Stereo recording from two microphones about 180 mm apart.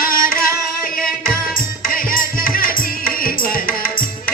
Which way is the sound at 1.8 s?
50° left (ahead or behind).